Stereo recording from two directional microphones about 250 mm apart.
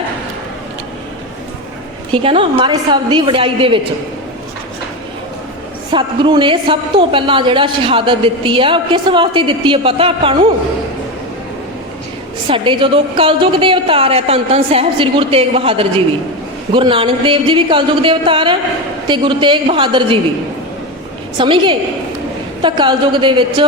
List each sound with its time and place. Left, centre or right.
2.2 s a woman's voice: right
5.9 s a woman's voice: centre
12.5 s a woman's voice: right
21.3 s a woman's voice: centre